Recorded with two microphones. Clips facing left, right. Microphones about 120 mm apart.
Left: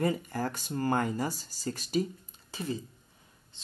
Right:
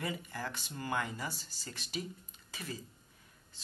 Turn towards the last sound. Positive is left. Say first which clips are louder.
# even
turn(degrees=20)  # may be behind; listen again after turning